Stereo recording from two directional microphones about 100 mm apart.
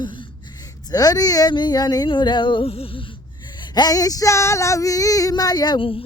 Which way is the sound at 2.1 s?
50° left (ahead or behind).